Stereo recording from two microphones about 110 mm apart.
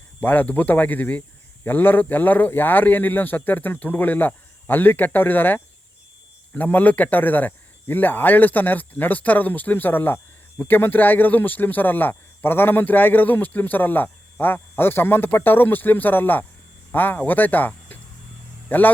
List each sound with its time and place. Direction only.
0.2 s speech: 15° left (ahead or behind)